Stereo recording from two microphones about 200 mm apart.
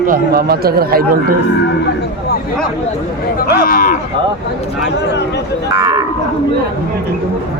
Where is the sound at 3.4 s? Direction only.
45° left (ahead or behind).